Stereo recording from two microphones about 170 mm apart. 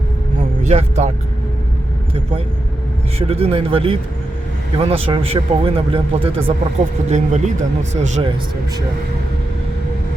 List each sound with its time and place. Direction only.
0.7 s speech: 40° right (ahead or behind)
3.2 s speech: 35° right (ahead or behind)
7.1 s speech: 45° right (ahead or behind)